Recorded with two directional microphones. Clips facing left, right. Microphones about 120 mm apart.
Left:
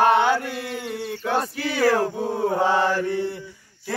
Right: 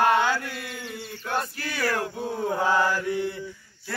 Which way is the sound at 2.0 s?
35° left (ahead or behind).